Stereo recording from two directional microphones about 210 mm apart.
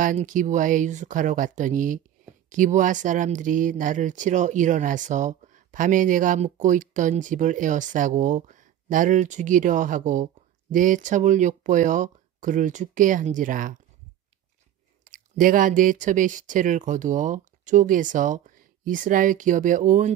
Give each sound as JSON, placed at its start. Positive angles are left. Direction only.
{"t": 0.0, "sound": "speech", "side_deg": -40}
{"t": 15.0, "sound": "speech", "side_deg": -40}